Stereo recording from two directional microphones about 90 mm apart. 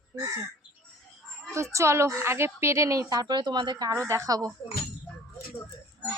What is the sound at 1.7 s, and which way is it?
A woman's voice, 30° right (ahead or behind).